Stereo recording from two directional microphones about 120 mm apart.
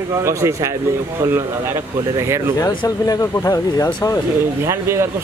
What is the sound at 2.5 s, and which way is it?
Speech, 30° left (ahead or behind).